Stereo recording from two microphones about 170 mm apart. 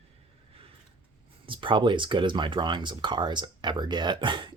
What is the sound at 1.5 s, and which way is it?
Speech, 30° right (ahead or behind).